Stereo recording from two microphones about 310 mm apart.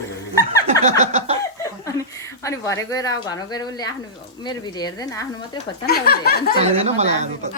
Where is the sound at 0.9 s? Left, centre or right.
Right.